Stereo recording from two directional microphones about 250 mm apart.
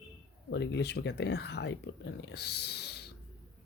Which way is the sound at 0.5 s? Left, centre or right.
Left.